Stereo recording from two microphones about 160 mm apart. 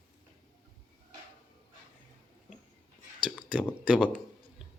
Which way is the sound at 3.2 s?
5° right (ahead or behind).